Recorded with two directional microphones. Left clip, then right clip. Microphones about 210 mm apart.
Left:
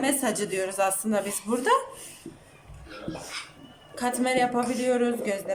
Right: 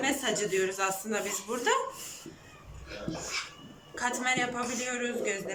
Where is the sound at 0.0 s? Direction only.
30° left (ahead or behind).